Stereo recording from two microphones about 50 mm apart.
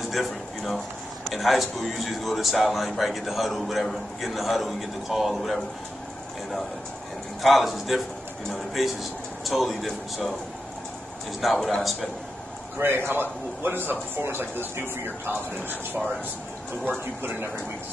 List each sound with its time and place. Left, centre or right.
0.1 s a man's voice: centre
7.4 s a man's voice: centre
11.4 s a man's voice: centre
12.7 s a man's voice: right